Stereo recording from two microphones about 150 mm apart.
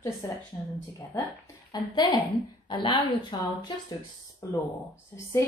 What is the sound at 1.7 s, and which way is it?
Speech, 25° left (ahead or behind).